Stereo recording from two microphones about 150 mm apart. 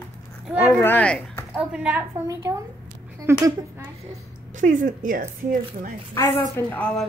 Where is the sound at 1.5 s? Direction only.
10° right (ahead or behind).